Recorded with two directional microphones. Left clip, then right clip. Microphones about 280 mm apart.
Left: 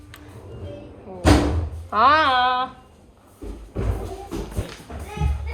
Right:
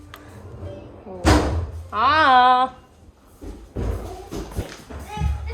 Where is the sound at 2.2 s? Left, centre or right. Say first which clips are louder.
Right 5 dB; centre.